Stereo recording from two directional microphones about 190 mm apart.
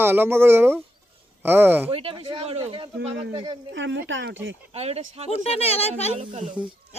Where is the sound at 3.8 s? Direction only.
75° right (ahead or behind).